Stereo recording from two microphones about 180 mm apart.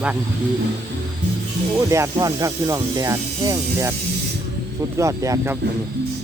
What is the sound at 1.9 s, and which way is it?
Speech, 15° right (ahead or behind).